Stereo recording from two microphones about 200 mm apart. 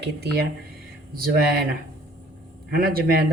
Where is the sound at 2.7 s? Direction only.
50° right (ahead or behind).